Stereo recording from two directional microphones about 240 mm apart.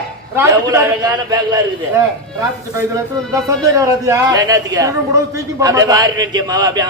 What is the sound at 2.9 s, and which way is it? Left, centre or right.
A man's voice, centre.